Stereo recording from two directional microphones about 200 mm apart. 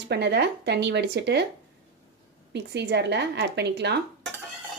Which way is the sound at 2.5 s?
55° right (ahead or behind).